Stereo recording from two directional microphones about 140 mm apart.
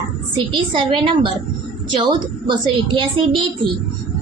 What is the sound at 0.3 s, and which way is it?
Speech, 35° right (ahead or behind).